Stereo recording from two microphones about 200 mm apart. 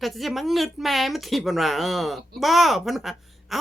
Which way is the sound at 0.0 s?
Centre (ahead or behind).